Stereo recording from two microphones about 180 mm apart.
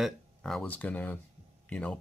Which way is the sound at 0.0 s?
5° left (ahead or behind).